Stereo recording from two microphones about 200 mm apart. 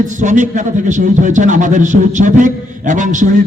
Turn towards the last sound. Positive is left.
turn(degrees=-40)  # may be behind; listen again after turning